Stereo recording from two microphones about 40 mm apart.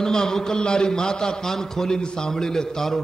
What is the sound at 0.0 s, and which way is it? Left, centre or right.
A man's voice, centre.